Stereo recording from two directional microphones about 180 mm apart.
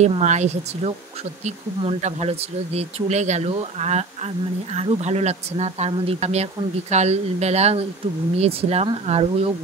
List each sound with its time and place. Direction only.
0.0 s speech: 40° right (ahead or behind)